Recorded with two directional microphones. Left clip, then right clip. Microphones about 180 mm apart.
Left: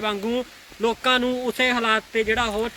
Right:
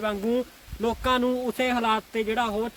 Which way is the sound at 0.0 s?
60° right (ahead or behind).